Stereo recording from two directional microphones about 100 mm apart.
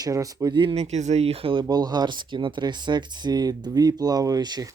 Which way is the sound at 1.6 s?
45° right (ahead or behind).